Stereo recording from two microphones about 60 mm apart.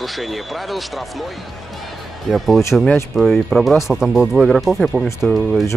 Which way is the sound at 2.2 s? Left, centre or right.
Centre.